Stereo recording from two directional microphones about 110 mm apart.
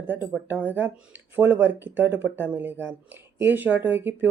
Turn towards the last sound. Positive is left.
turn(degrees=-15)  # may be behind; listen again after turning